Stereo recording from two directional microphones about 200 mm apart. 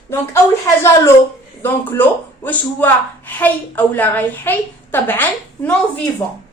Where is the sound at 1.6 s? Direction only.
10° left (ahead or behind).